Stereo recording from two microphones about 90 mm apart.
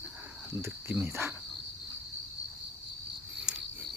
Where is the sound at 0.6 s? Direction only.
25° right (ahead or behind).